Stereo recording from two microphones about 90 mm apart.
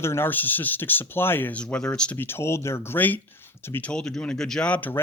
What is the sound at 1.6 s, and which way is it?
Speech, 10° left (ahead or behind).